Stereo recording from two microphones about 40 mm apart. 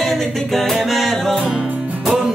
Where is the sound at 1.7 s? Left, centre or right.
Right.